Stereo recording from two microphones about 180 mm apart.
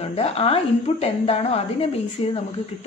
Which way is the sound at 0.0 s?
35° left (ahead or behind).